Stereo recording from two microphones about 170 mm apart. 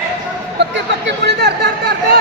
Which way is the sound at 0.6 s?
90° right.